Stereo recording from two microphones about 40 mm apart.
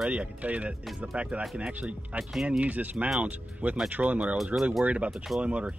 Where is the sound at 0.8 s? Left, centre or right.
Centre.